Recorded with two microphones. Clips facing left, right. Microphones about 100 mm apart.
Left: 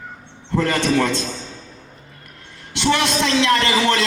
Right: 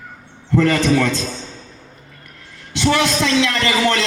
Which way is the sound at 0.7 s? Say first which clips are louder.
Right 2 dB; 30° left (ahead or behind).